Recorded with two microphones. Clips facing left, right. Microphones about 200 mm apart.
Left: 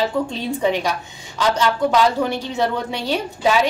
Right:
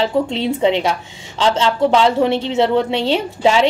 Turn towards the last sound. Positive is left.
turn(degrees=-25)  # may be behind; listen again after turning